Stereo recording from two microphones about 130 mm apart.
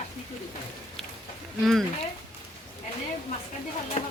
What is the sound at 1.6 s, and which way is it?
Speech, centre (ahead or behind).